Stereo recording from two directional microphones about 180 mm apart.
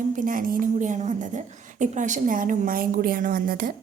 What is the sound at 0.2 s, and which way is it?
A woman's voice, 50° right (ahead or behind).